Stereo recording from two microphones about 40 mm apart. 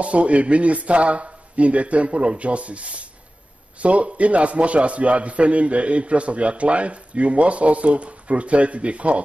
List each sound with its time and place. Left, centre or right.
0.0 s a man's voice: right